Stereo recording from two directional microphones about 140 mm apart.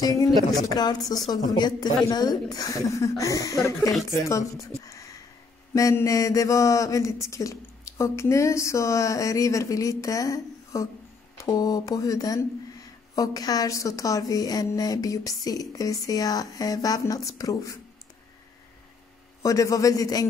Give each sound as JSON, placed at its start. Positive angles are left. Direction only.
{"t": 0.0, "sound": "speech", "side_deg": 25}
{"t": 0.4, "sound": "a woman's voice", "side_deg": 0}
{"t": 0.7, "sound": "a man's voice", "side_deg": 25}
{"t": 19.4, "sound": "speech", "side_deg": 25}